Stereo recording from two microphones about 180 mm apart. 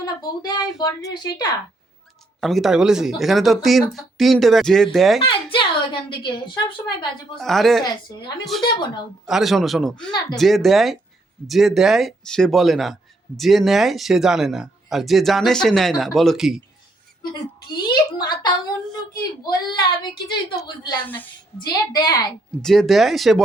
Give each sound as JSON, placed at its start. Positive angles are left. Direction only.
{"t": 0.0, "sound": "speech", "side_deg": 20}
{"t": 2.4, "sound": "speech", "side_deg": 0}
{"t": 5.2, "sound": "a woman's voice", "side_deg": 30}
{"t": 7.3, "sound": "speech", "side_deg": 0}
{"t": 10.1, "sound": "speech", "side_deg": 25}
{"t": 10.3, "sound": "speech", "side_deg": 0}
{"t": 17.7, "sound": "speech", "side_deg": 25}
{"t": 21.6, "sound": "speech", "side_deg": 20}
{"t": 22.6, "sound": "speech", "side_deg": 0}